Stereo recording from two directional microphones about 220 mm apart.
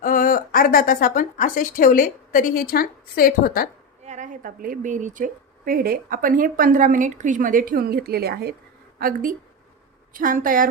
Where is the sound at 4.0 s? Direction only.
35° right (ahead or behind).